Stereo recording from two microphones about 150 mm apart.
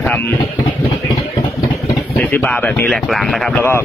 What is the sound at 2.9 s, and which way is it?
Speech, centre (ahead or behind).